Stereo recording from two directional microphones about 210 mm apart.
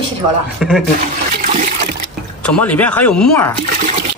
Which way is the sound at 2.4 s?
5° left (ahead or behind).